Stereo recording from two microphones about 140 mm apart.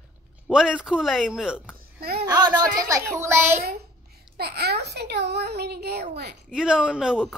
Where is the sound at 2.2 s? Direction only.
30° right (ahead or behind).